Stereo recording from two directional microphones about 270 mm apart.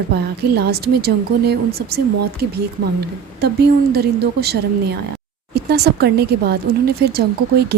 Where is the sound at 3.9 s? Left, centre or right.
Right.